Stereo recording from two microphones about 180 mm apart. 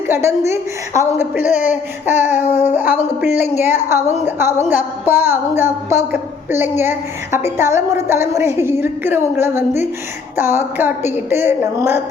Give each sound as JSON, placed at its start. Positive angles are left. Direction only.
{"t": 0.1, "sound": "speech", "side_deg": -15}